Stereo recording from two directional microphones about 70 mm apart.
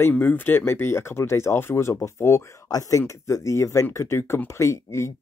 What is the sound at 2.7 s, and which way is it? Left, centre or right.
Speech, left.